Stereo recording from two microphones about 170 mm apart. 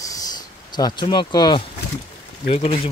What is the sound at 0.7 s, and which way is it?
Speech, 25° left (ahead or behind).